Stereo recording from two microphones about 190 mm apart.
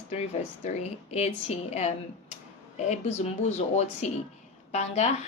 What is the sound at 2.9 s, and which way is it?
A woman's voice, 35° left (ahead or behind).